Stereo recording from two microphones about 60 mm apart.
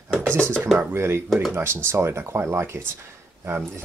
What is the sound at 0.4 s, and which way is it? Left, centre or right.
Speech, centre.